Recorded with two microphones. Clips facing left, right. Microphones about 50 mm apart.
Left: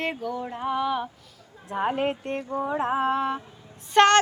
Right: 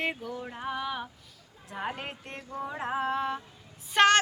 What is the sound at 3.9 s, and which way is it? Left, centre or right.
Speech, centre.